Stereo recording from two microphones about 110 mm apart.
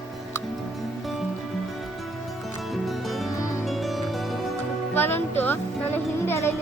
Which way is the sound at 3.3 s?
30° left (ahead or behind).